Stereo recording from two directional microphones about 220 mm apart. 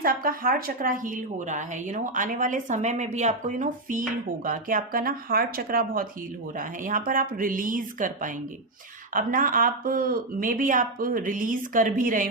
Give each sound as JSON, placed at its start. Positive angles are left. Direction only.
{"t": 0.0, "sound": "a woman's voice", "side_deg": -40}